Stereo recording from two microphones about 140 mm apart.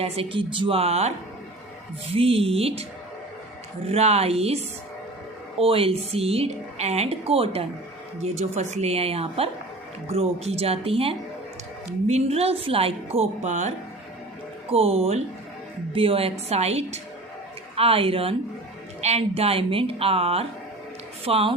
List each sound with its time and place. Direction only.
0.0 s a woman's voice: 40° right (ahead or behind)
2.1 s a woman's voice: 40° right (ahead or behind)
3.8 s a woman's voice: 50° right (ahead or behind)
14.7 s a woman's voice: 45° right (ahead or behind)